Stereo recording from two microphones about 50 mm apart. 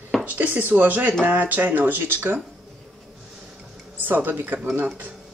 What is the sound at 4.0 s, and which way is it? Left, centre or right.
Speech, right.